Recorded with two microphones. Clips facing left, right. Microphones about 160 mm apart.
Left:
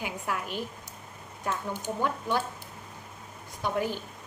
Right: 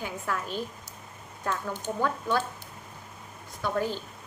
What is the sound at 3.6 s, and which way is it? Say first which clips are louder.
Speech: right 1 dB; 15° left (ahead or behind).